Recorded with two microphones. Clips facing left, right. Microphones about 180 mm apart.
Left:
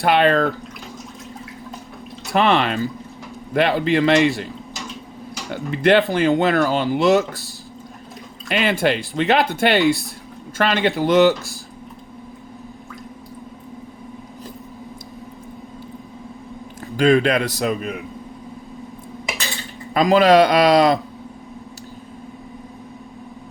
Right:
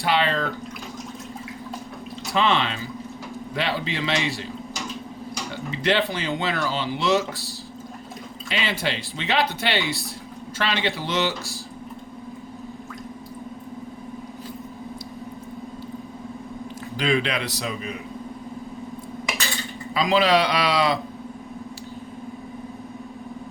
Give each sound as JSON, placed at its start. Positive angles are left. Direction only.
{"t": 0.0, "sound": "speech", "side_deg": 55}
{"t": 2.3, "sound": "speech", "side_deg": 55}
{"t": 5.5, "sound": "speech", "side_deg": 55}
{"t": 8.4, "sound": "speech", "side_deg": 55}
{"t": 9.7, "sound": "speech", "side_deg": 0}
{"t": 10.6, "sound": "speech", "side_deg": 50}
{"t": 17.0, "sound": "speech", "side_deg": 45}
{"t": 19.9, "sound": "speech", "side_deg": 45}